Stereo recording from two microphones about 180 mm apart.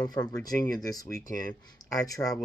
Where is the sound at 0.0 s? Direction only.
20° left (ahead or behind).